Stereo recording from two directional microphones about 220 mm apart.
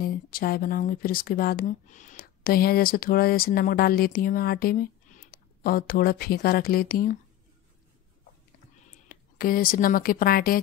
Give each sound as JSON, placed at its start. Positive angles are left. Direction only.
{"t": 0.0, "sound": "speech", "side_deg": 40}
{"t": 9.1, "sound": "speech", "side_deg": 40}